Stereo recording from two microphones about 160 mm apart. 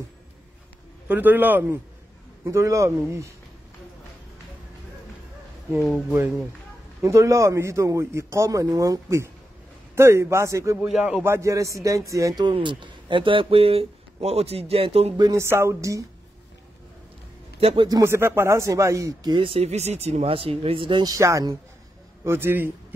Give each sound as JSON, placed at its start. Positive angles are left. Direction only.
{"t": 1.0, "sound": "a man's voice", "side_deg": -10}
{"t": 5.8, "sound": "a man's voice", "side_deg": 0}
{"t": 10.9, "sound": "speech", "side_deg": -5}
{"t": 11.2, "sound": "a man's voice", "side_deg": -15}
{"t": 15.1, "sound": "speech", "side_deg": -20}
{"t": 17.6, "sound": "a man's voice", "side_deg": -40}
{"t": 17.8, "sound": "a man's voice", "side_deg": -20}